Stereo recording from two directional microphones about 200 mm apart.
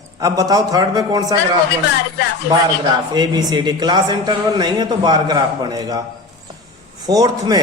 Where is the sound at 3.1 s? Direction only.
20° right (ahead or behind).